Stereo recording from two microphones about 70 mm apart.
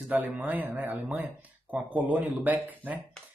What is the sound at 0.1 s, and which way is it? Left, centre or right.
Speech, right.